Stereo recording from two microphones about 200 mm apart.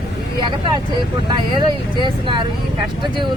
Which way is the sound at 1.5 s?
25° right (ahead or behind).